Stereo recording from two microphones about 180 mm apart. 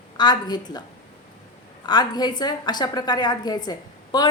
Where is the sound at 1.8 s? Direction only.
25° left (ahead or behind).